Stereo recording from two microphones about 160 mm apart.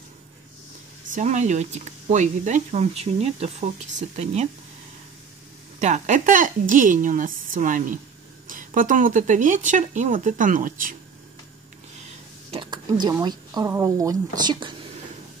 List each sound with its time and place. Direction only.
1.1 s speech: 50° right (ahead or behind)
5.8 s a woman's voice: 45° right (ahead or behind)
12.4 s a sound: 30° right (ahead or behind)
13.2 s speech: 25° right (ahead or behind)